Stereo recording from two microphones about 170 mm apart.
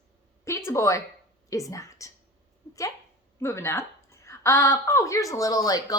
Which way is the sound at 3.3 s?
15° left (ahead or behind).